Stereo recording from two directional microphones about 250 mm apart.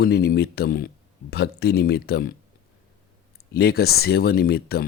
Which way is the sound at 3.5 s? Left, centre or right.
Left.